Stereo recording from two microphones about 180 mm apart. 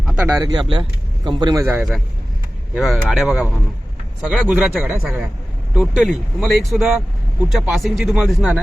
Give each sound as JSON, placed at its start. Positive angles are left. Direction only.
{"t": 0.0, "sound": "a sound", "side_deg": -5}
{"t": 0.3, "sound": "speech", "side_deg": -25}
{"t": 1.6, "sound": "a man's voice", "side_deg": -10}